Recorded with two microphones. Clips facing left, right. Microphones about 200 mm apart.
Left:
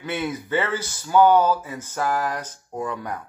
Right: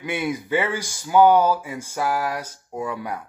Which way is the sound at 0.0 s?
10° right (ahead or behind).